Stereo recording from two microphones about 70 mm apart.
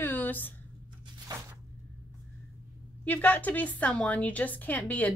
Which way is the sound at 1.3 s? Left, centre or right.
Right.